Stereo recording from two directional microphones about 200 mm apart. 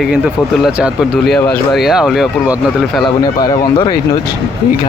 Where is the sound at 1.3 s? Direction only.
Centre (ahead or behind).